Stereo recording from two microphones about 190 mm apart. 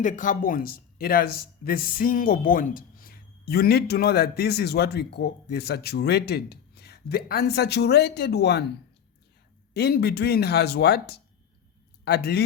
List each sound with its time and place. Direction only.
0.0 s speech: 40° left (ahead or behind); by 8.6 s 60° left (ahead or behind)
9.7 s speech: 55° left (ahead or behind)